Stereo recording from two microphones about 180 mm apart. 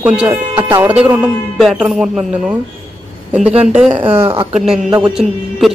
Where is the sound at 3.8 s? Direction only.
30° right (ahead or behind).